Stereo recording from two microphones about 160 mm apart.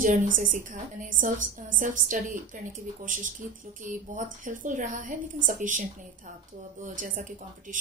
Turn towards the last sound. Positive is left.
turn(degrees=-55)  # may be behind; listen again after turning